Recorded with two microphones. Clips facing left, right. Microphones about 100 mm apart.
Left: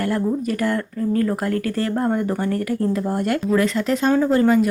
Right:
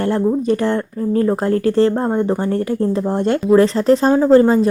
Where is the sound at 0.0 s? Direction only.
25° right (ahead or behind).